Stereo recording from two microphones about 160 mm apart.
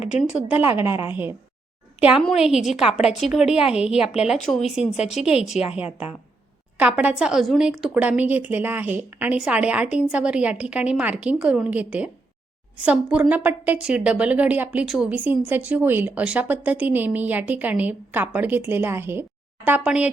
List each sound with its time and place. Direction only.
0.0 s speech: 45° left (ahead or behind)
0.3 s a woman's voice: 10° right (ahead or behind)
6.7 s a woman's voice: 10° right (ahead or behind)